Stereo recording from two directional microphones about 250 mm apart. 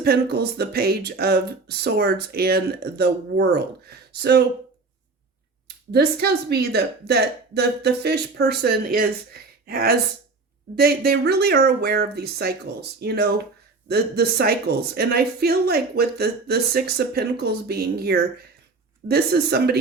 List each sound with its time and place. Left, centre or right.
0.0 s speech: right
5.6 s speech: right